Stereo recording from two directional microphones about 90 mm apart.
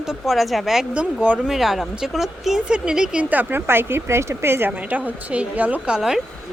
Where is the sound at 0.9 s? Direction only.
15° right (ahead or behind).